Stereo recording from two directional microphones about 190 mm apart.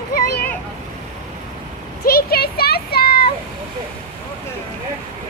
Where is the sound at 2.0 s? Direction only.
55° left (ahead or behind).